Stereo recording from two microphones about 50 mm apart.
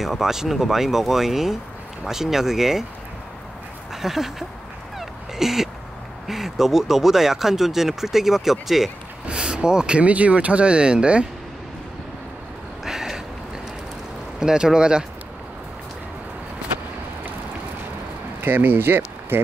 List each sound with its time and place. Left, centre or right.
0.0 s speech: centre
3.9 s speech: centre
4.9 s a sound: centre
6.2 s speech: centre
9.3 s speech: centre
12.8 s a sound: centre
14.4 s speech: centre
18.4 s speech: right